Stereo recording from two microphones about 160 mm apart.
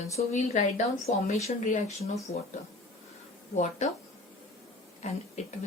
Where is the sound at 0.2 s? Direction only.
45° left (ahead or behind).